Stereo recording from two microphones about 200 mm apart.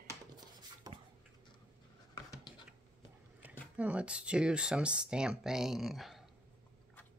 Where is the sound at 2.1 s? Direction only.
20° left (ahead or behind).